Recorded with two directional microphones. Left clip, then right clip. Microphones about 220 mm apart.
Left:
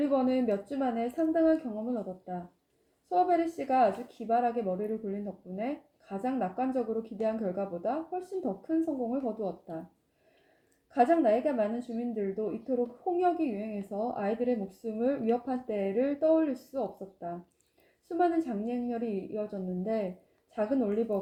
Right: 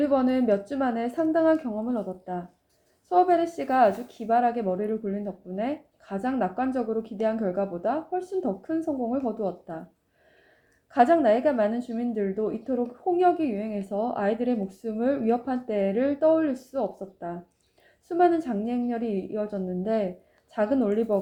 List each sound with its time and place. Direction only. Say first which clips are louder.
0.0 s a woman's voice: right 5 dB; 40° right (ahead or behind)
10.9 s a woman's voice: right 5 dB; 35° right (ahead or behind)